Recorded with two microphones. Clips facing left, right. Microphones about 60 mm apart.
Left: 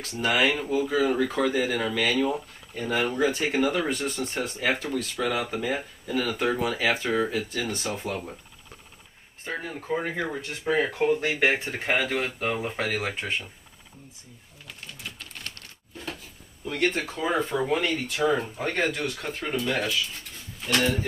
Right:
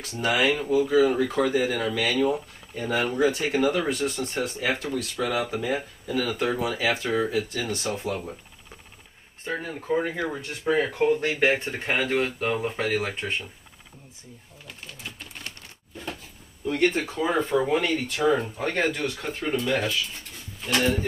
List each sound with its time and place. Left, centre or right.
0.1 s speech: centre
9.4 s speech: centre
14.7 s speech: centre
16.6 s speech: centre